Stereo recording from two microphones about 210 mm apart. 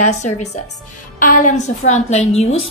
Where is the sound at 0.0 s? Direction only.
30° left (ahead or behind).